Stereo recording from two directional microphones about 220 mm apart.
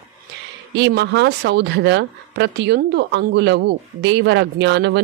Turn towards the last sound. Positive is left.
turn(degrees=-50)  # may be behind; listen again after turning